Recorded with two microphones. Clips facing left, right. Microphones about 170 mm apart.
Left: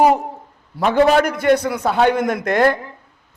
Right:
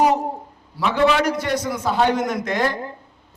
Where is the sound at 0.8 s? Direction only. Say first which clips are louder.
Left 4 dB; 50° left (ahead or behind).